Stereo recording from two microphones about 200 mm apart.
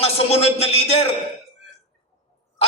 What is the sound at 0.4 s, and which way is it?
Speech, 30° left (ahead or behind).